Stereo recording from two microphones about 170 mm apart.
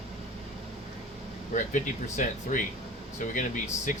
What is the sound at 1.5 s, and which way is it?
Speech, 50° left (ahead or behind).